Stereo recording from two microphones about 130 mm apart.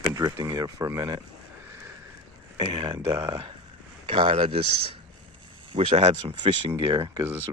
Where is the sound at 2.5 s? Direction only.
40° right (ahead or behind).